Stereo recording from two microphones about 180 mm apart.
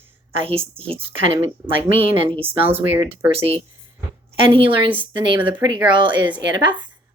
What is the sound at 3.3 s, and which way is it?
A woman's voice, 30° right (ahead or behind).